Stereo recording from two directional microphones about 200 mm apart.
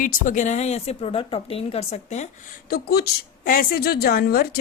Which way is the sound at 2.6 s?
50° left (ahead or behind).